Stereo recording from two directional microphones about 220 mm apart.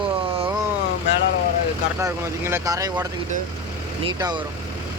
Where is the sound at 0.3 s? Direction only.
25° right (ahead or behind).